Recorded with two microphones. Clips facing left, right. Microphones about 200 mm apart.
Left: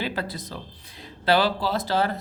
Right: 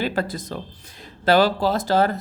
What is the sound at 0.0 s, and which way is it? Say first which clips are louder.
Speech: right 5 dB; 45° right (ahead or behind).